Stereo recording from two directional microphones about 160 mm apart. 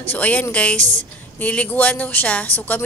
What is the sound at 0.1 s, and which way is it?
A woman's voice, 10° left (ahead or behind).